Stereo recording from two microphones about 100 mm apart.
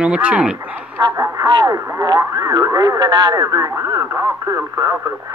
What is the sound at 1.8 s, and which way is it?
Speech, 35° right (ahead or behind).